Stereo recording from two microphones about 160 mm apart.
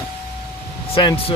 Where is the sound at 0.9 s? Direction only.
35° left (ahead or behind).